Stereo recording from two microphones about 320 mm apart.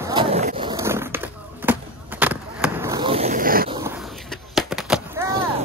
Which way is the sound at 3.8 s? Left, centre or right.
Centre.